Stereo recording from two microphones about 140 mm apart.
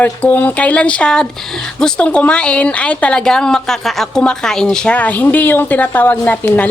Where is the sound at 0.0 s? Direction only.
10° left (ahead or behind).